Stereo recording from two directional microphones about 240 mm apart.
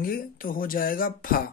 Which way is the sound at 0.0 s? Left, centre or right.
Left.